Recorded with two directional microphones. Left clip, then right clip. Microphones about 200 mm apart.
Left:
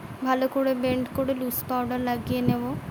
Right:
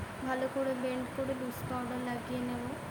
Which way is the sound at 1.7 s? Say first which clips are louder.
Left 12 dB; 55° left (ahead or behind).